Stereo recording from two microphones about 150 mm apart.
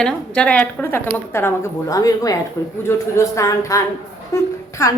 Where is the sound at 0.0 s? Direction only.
5° left (ahead or behind).